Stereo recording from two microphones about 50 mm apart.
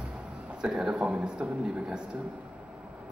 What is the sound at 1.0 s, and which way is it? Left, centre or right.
Speech, centre.